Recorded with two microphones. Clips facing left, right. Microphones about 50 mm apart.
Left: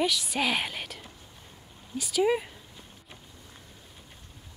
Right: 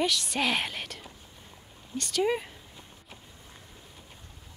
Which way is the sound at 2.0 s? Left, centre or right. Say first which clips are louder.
Left 2 dB; centre.